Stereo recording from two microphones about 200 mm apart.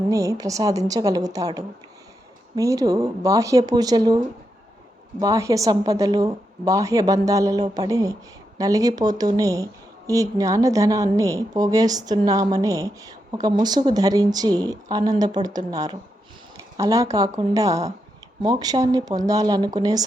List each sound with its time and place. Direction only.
0.1 s a woman's voice: 15° right (ahead or behind)
5.2 s a woman's voice: 15° right (ahead or behind)